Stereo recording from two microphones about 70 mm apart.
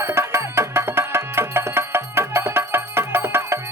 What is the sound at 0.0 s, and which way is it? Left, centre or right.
Music, right.